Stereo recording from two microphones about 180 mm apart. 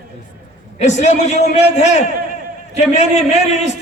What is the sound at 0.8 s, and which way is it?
A man's voice, 40° left (ahead or behind).